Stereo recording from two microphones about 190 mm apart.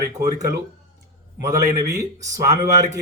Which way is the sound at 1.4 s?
15° right (ahead or behind).